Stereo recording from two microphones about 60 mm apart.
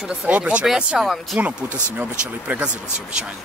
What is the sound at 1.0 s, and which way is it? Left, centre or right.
Speech, centre.